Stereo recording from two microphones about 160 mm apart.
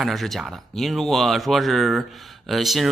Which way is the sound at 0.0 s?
Centre (ahead or behind).